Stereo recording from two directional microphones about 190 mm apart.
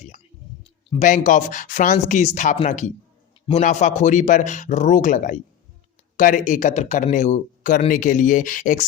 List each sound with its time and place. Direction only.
0.9 s a man's voice: 40° left (ahead or behind)